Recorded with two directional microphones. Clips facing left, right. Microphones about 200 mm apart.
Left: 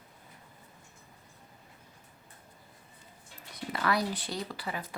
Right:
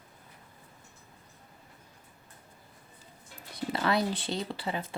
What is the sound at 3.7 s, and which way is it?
Speech, 25° right (ahead or behind).